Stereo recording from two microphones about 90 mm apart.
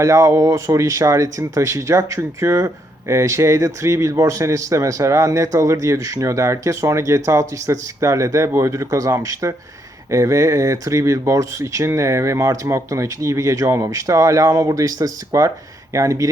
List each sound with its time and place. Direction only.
0.0 s speech: 35° right (ahead or behind)